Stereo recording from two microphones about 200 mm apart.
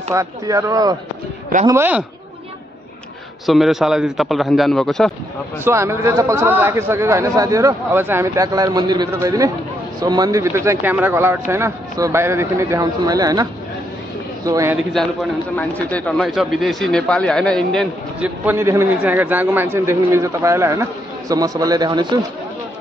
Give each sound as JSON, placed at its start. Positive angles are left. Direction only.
{"t": 0.1, "sound": "a man's voice", "side_deg": -15}
{"t": 3.4, "sound": "speech", "side_deg": 0}
{"t": 5.6, "sound": "a man's voice", "side_deg": -15}
{"t": 15.5, "sound": "speech", "side_deg": 5}
{"t": 18.4, "sound": "a man's voice", "side_deg": -10}